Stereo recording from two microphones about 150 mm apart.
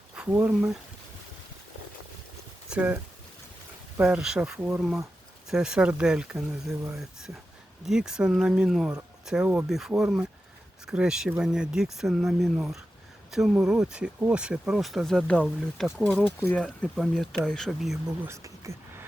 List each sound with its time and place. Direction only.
0.2 s speech: 10° right (ahead or behind)
2.6 s speech: 10° right (ahead or behind)
4.0 s speech: 5° right (ahead or behind)
7.9 s speech: 5° right (ahead or behind)
18.3 s a sound: 20° right (ahead or behind)